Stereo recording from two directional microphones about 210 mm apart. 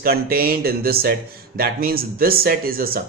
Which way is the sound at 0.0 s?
45° right (ahead or behind).